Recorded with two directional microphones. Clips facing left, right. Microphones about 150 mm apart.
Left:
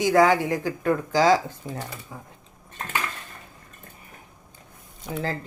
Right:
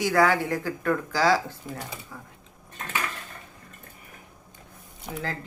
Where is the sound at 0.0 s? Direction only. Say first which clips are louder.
Left 3 dB; 20° left (ahead or behind).